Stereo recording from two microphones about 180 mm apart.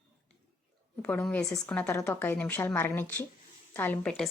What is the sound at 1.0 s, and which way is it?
Speech, 10° left (ahead or behind).